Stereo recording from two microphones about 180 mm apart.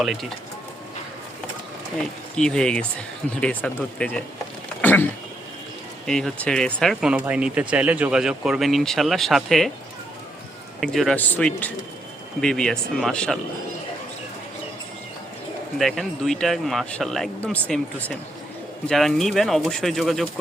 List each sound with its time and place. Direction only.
0.0 s speech: centre (ahead or behind)
2.3 s speech: 5° left (ahead or behind)
4.8 s a sound: 10° left (ahead or behind)
6.1 s speech: 5° left (ahead or behind)
10.8 s speech: centre (ahead or behind)
15.8 s speech: centre (ahead or behind)